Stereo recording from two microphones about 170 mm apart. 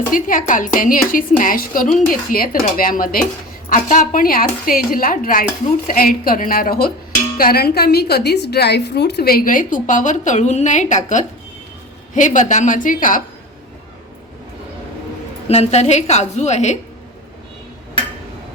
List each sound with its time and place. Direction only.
0.1 s a woman's voice: 55° left (ahead or behind)
15.4 s a woman's voice: 40° left (ahead or behind)